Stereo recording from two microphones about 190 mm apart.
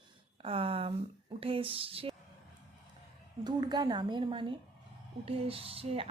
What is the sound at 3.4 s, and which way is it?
A woman's voice, 20° right (ahead or behind).